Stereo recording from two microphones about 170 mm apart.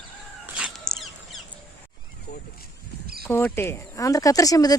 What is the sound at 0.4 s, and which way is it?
Dog, 5° right (ahead or behind).